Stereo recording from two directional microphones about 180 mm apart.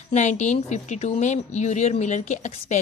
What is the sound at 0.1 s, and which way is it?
A woman's voice, 40° left (ahead or behind).